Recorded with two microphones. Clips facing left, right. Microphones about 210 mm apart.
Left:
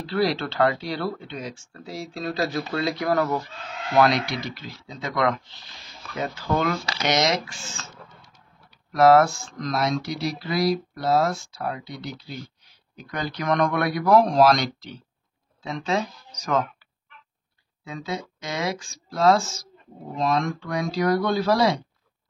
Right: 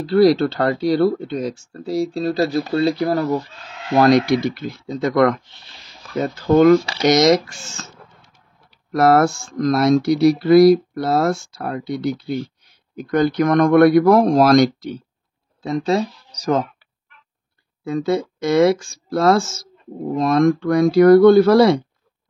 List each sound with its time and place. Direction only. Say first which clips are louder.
0.0 s speech: right 10 dB; 40° right (ahead or behind)
9.0 s speech: right 1 dB; 55° right (ahead or behind); by 16.6 s 35° right (ahead or behind)
17.8 s speech: right 12 dB; 50° right (ahead or behind)